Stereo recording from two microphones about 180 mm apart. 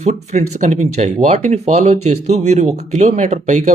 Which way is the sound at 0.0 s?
40° right (ahead or behind).